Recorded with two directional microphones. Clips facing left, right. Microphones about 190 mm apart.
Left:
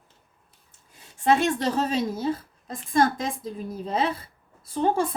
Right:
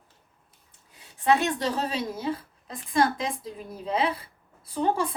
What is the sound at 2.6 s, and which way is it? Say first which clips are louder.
Speech: left 2 dB; 45° left (ahead or behind).